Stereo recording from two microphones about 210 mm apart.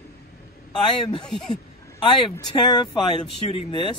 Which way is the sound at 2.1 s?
20° left (ahead or behind).